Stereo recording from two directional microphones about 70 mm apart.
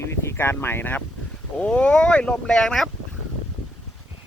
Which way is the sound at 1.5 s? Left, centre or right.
Centre.